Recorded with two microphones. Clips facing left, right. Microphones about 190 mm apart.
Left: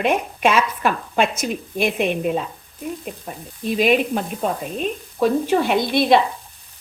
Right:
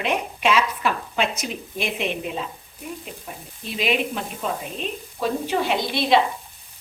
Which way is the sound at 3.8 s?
45° left (ahead or behind).